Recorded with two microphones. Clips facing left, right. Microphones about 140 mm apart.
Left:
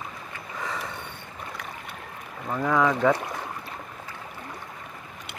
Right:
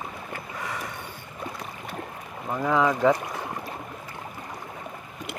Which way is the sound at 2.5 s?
10° right (ahead or behind).